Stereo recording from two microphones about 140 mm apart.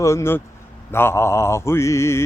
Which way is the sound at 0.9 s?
15° left (ahead or behind).